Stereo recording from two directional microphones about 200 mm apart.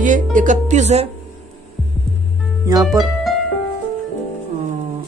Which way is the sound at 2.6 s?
15° right (ahead or behind).